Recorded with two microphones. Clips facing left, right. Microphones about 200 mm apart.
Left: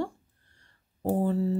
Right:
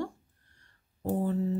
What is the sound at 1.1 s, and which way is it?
Speech, 35° left (ahead or behind).